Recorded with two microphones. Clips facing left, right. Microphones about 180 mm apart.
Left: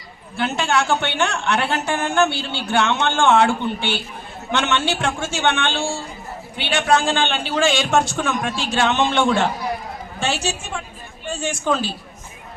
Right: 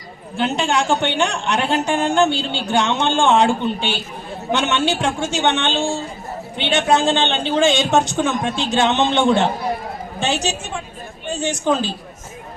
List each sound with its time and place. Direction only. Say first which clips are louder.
0.3 s a woman's voice: right 2 dB; 15° right (ahead or behind)